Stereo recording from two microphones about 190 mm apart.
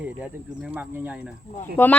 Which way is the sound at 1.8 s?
10° left (ahead or behind).